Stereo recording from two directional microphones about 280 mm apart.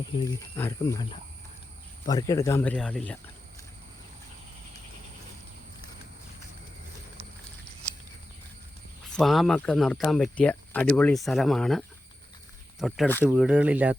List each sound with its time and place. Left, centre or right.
0.3 s speech: centre
9.1 s speech: centre
12.8 s speech: centre